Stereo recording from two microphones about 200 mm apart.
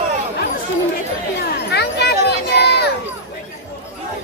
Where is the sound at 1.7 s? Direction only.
55° left (ahead or behind).